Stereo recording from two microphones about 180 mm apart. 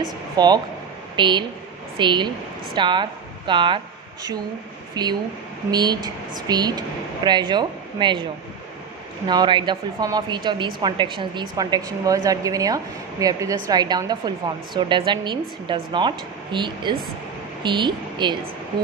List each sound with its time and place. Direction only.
0.4 s a woman's voice: 20° right (ahead or behind)
9.3 s a woman's voice: 25° right (ahead or behind)